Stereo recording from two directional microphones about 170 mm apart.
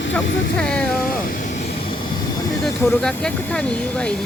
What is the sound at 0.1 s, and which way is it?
Speech, 5° left (ahead or behind).